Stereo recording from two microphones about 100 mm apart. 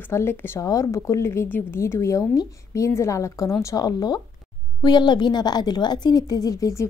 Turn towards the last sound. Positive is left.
turn(degrees=35)  # may be behind; listen again after turning